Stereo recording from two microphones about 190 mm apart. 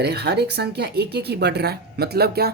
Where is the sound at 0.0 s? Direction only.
60° right (ahead or behind).